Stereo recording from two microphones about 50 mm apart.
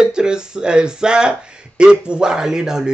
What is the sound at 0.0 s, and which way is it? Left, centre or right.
Speech, centre.